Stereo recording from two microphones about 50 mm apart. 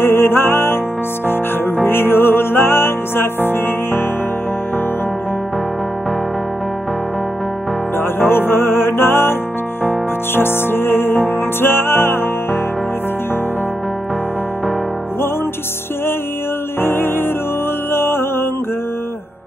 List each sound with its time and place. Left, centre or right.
0.0 s music: left
1.9 s music: left
8.3 s music: left
16.8 s music: left